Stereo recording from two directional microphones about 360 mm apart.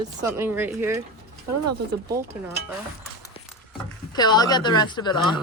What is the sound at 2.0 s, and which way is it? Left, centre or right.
Speech, centre.